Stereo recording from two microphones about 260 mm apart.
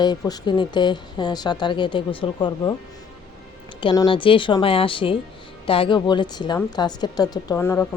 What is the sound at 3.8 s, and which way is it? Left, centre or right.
A woman's voice, centre.